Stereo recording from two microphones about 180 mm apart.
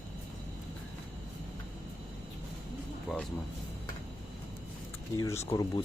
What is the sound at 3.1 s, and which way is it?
Music, centre (ahead or behind).